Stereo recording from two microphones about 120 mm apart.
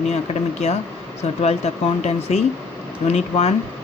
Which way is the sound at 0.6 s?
65° left (ahead or behind).